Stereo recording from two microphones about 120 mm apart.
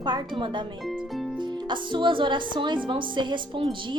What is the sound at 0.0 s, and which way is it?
Speech, 40° right (ahead or behind).